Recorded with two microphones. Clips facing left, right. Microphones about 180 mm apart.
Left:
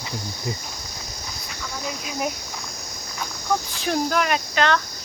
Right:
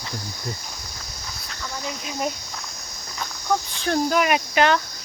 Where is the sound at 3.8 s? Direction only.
Centre (ahead or behind).